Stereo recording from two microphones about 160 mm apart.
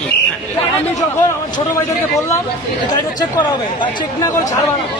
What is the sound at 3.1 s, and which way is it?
Speech, 25° left (ahead or behind).